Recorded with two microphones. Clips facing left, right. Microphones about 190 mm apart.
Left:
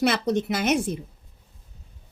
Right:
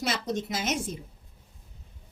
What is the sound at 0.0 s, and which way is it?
Speech, 65° left (ahead or behind).